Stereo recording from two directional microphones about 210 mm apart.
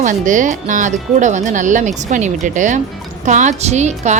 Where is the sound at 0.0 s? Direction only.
35° right (ahead or behind).